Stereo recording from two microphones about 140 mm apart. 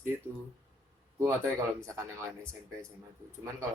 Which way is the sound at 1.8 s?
20° right (ahead or behind).